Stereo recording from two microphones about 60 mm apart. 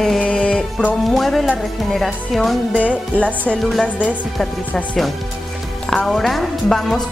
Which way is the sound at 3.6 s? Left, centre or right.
Centre.